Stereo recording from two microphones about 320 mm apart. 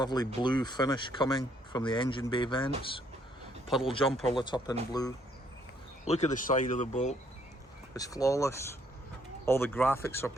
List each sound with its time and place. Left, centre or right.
0.0 s speech: centre
7.9 s speech: centre